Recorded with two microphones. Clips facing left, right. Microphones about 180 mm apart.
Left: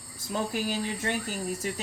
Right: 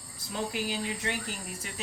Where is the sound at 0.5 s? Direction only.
45° left (ahead or behind).